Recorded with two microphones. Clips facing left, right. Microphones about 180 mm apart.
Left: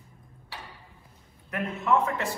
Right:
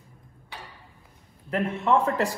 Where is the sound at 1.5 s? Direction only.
30° right (ahead or behind).